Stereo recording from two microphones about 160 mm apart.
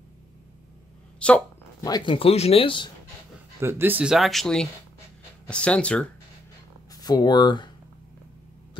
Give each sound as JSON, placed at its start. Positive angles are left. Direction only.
{"t": 1.2, "sound": "speech", "side_deg": 5}
{"t": 1.8, "sound": "speech", "side_deg": 25}
{"t": 3.6, "sound": "speech", "side_deg": -15}
{"t": 6.9, "sound": "speech", "side_deg": 25}